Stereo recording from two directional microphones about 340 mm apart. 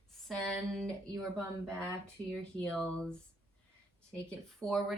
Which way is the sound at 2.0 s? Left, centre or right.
Centre.